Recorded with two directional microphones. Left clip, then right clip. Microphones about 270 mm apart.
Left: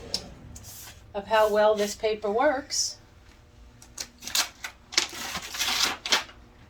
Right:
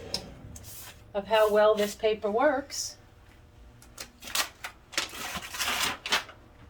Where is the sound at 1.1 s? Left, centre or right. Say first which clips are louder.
Left 1 dB; centre.